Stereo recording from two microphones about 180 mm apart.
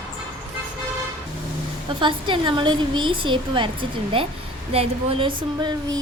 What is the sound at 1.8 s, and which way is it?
A woman's voice, 25° right (ahead or behind).